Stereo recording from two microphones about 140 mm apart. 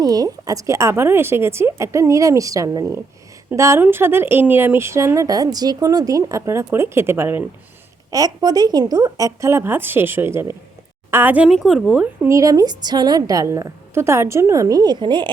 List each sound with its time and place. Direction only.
0.0 s speech: 25° right (ahead or behind)
8.1 s a woman's voice: 25° right (ahead or behind)
11.4 s a woman's voice: centre (ahead or behind)
11.9 s speech: 10° right (ahead or behind); by 15.3 s 35° right (ahead or behind)